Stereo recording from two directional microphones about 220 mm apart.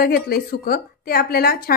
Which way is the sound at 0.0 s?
45° left (ahead or behind).